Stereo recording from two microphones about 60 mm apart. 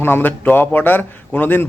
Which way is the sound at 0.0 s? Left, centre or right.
Left.